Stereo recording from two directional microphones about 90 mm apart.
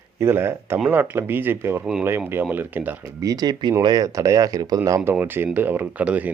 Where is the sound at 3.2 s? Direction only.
45° right (ahead or behind).